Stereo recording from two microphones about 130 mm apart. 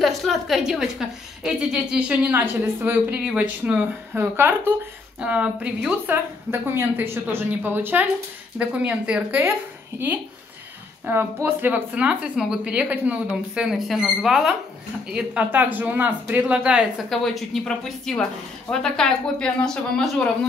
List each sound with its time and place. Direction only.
0.0 s a woman's voice: centre (ahead or behind)
11.4 s a woman's voice: 15° right (ahead or behind); by 20.3 s 5° left (ahead or behind)